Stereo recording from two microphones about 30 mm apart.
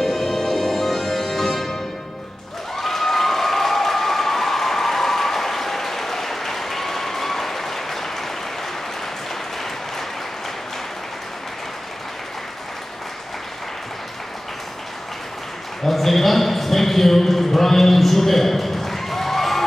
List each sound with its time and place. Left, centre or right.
0.0 s music: centre
2.8 s applause: centre
15.9 s a sound: centre